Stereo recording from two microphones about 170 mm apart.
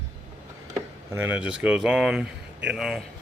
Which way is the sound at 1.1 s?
10° right (ahead or behind).